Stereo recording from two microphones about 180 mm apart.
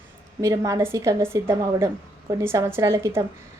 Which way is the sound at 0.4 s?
20° right (ahead or behind).